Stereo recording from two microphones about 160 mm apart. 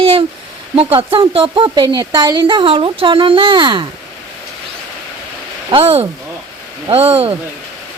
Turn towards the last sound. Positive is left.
turn(degrees=-35)  # may be behind; listen again after turning